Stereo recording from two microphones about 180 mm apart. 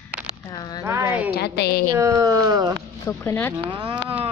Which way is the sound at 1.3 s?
65° left (ahead or behind).